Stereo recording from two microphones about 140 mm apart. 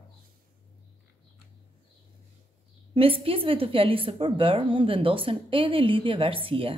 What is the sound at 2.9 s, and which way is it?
A woman's voice, 40° right (ahead or behind).